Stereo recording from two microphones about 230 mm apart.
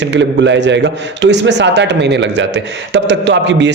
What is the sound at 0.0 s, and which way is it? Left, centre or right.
A man's voice, right.